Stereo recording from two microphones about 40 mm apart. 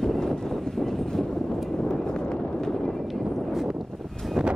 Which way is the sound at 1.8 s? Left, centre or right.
Left.